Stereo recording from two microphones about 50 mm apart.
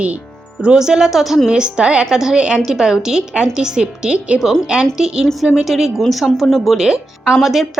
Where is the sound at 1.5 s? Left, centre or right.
Centre.